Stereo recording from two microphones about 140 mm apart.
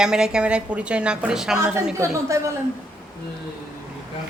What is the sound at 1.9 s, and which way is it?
Speech, 20° right (ahead or behind).